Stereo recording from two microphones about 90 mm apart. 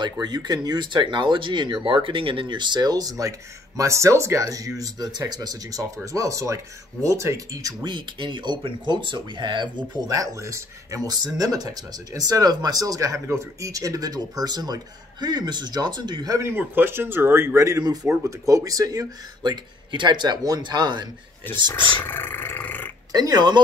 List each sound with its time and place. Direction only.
0.0 s speech: 50° right (ahead or behind)
10.0 s speech: 35° right (ahead or behind); by 16.3 s 55° right (ahead or behind)
16.3 s a man's voice: 25° right (ahead or behind)
18.5 s speech: 40° right (ahead or behind)
22.0 s roar: 20° left (ahead or behind)
23.1 s speech: 50° right (ahead or behind)